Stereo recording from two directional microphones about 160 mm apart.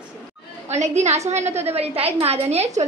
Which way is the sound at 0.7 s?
45° right (ahead or behind).